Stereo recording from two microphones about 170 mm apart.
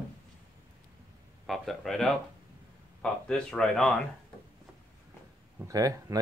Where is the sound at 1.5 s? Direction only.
Centre (ahead or behind).